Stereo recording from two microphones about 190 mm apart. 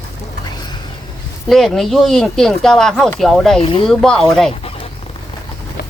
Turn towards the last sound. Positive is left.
turn(degrees=0)  # may be behind; listen again after turning